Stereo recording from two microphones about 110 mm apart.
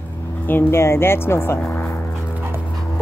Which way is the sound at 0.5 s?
20° left (ahead or behind).